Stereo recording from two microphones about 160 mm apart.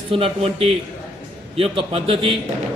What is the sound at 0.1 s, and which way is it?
A man's voice, 35° right (ahead or behind).